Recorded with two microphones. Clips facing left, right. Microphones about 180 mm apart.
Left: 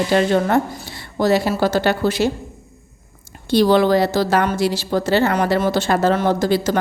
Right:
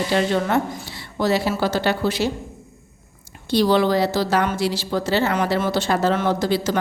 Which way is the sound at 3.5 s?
50° left (ahead or behind).